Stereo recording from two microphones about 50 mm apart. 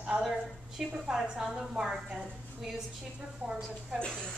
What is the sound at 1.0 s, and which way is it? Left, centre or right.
A woman's voice, centre.